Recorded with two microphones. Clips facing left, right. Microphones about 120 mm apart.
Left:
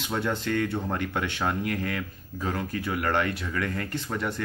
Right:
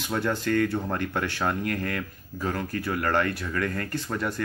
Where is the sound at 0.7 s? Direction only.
20° left (ahead or behind).